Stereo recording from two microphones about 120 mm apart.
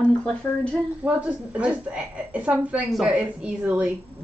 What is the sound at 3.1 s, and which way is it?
Speech, 10° right (ahead or behind).